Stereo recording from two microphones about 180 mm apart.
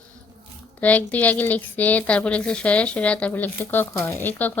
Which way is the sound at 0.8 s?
10° left (ahead or behind).